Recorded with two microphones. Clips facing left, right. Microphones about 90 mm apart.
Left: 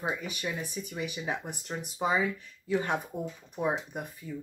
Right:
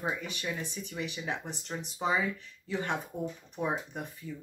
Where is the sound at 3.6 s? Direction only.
10° left (ahead or behind).